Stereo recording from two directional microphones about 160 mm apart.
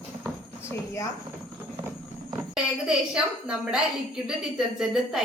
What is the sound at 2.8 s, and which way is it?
A woman's voice, 5° right (ahead or behind).